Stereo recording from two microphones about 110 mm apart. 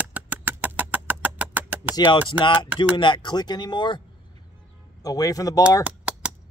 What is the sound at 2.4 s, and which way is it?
Speech, 45° left (ahead or behind).